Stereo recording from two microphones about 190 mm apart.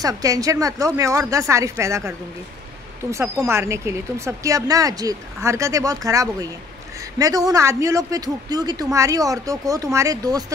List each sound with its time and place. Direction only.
0.0 s speech: 20° right (ahead or behind)